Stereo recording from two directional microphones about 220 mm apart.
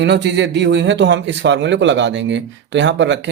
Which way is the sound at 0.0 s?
50° right (ahead or behind).